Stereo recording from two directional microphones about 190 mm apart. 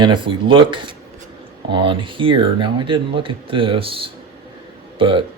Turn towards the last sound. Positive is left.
turn(degrees=-25)  # may be behind; listen again after turning